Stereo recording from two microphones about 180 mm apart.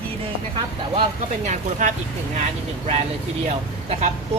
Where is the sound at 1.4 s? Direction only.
40° right (ahead or behind).